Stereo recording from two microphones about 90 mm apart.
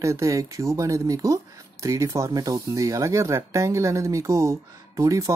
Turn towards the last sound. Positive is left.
turn(degrees=-35)  # may be behind; listen again after turning